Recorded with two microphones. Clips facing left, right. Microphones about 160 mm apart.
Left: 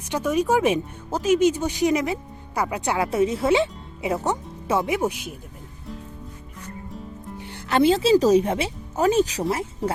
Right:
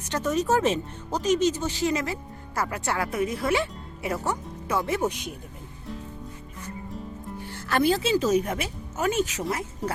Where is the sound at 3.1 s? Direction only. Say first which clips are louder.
Left 7 dB; 30° left (ahead or behind).